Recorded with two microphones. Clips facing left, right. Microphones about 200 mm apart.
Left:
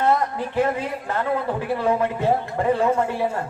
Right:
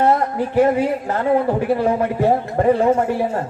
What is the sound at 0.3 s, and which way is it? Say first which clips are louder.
Speech: right 6 dB; 35° right (ahead or behind).